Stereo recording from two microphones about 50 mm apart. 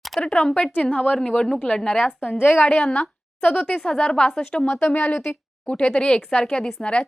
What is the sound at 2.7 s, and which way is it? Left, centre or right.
Speech, centre.